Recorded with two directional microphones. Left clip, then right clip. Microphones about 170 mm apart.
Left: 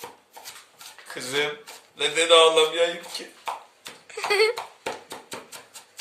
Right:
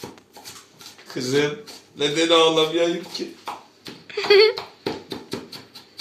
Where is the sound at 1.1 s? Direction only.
Centre (ahead or behind).